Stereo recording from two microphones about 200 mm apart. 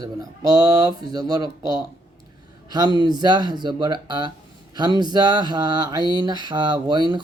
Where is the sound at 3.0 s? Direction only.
20° right (ahead or behind).